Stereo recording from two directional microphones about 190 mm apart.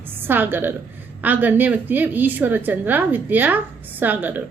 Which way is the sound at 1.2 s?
10° right (ahead or behind).